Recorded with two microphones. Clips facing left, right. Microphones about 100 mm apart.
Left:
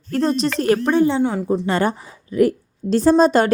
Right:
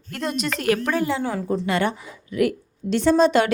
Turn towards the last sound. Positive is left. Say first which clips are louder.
# left 3 dB
turn(degrees=40)  # may be behind; listen again after turning